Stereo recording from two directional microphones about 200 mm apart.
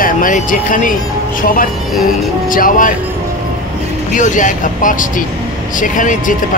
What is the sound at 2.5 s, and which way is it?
Speech, 45° left (ahead or behind).